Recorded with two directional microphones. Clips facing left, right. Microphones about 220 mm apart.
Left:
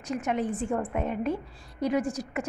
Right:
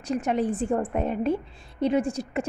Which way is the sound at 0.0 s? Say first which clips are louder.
Right 4 dB; 30° right (ahead or behind).